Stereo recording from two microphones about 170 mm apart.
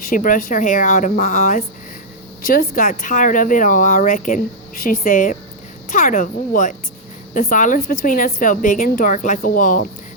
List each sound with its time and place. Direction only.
0.0 s a woman's voice: 55° left (ahead or behind)